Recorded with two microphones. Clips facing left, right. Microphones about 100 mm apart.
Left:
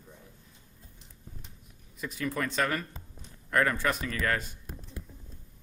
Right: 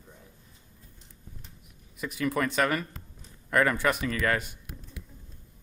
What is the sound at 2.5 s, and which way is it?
Speech, 75° right (ahead or behind).